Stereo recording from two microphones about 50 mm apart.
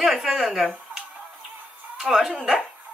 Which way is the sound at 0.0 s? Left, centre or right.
Centre.